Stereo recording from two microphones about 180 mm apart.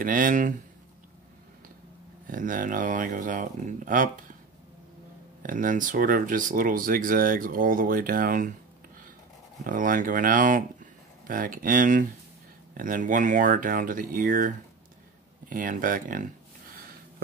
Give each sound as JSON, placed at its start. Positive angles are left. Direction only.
{"t": 0.0, "sound": "speech", "side_deg": -50}
{"t": 2.2, "sound": "speech", "side_deg": -50}
{"t": 5.4, "sound": "speech", "side_deg": -50}
{"t": 9.7, "sound": "speech", "side_deg": -50}